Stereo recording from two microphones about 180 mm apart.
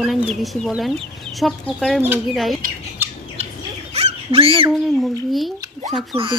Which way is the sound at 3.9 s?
35° right (ahead or behind).